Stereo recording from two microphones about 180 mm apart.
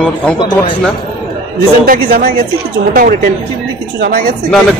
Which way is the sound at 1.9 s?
55° right (ahead or behind).